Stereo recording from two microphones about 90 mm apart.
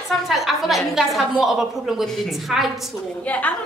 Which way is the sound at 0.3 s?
Centre (ahead or behind).